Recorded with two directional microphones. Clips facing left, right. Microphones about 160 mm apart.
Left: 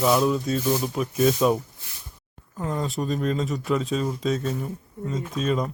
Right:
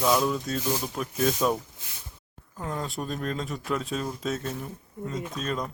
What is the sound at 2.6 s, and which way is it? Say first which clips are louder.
Speech: left 5 dB; centre (ahead or behind).